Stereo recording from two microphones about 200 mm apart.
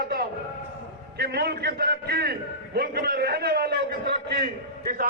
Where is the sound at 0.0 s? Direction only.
50° right (ahead or behind).